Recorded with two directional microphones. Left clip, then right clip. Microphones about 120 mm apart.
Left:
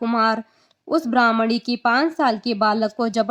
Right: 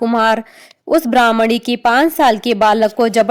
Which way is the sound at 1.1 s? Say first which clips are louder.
Right 5 dB; 35° right (ahead or behind).